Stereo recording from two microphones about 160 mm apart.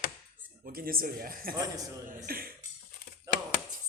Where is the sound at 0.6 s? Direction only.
65° right (ahead or behind).